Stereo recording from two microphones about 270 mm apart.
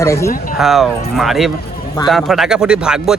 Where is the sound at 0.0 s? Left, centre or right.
Centre.